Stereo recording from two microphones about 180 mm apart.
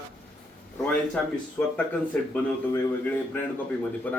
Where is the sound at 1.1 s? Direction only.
5° left (ahead or behind).